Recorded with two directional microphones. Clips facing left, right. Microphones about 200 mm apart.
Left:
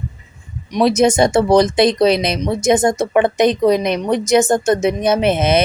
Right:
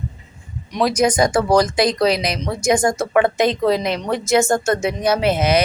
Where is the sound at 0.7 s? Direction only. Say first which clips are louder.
Left 4 dB; 25° left (ahead or behind).